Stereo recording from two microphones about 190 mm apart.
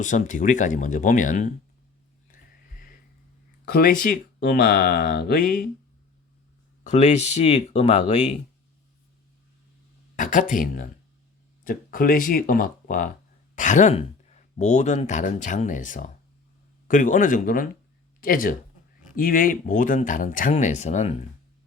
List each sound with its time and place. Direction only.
0.0 s speech: 40° left (ahead or behind)
2.3 s music: 45° left (ahead or behind)
3.7 s speech: 55° left (ahead or behind)
6.8 s speech: 35° left (ahead or behind)
10.2 s speech: 45° left (ahead or behind)